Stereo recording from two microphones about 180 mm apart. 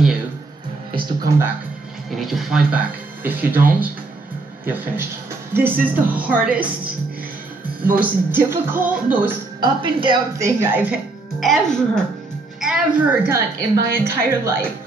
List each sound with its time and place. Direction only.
2.0 s speech: centre (ahead or behind)
7.8 s speech: 10° right (ahead or behind)
9.6 s a woman's voice: 25° right (ahead or behind)
10.4 s speech: 10° right (ahead or behind)
11.3 s a woman's voice: centre (ahead or behind)